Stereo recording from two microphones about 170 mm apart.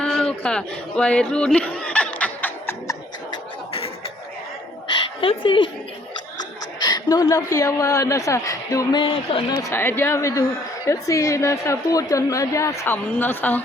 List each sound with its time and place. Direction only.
0.0 s a sound: 5° left (ahead or behind)
5.2 s speech: 30° left (ahead or behind)
6.7 s a woman's voice: 25° left (ahead or behind)
9.6 s a woman's voice: 15° left (ahead or behind)